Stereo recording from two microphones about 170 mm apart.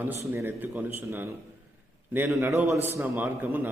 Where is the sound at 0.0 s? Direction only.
15° right (ahead or behind).